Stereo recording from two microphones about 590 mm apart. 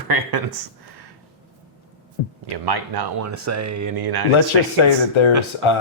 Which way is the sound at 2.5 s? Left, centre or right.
Right.